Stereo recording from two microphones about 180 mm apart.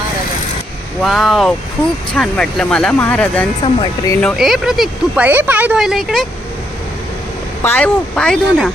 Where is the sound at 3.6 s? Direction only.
25° left (ahead or behind).